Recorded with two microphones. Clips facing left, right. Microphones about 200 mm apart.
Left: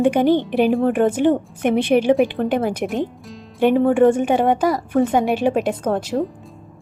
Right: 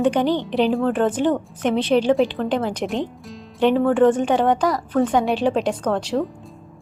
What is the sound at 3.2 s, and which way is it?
Speech, 5° left (ahead or behind).